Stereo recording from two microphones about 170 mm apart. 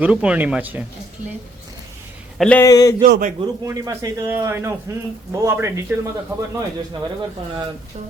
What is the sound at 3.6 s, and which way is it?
Speech, 20° right (ahead or behind).